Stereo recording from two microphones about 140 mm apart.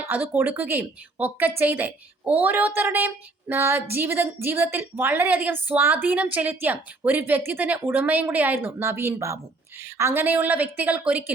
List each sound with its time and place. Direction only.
0.0 s a woman's voice: 15° right (ahead or behind)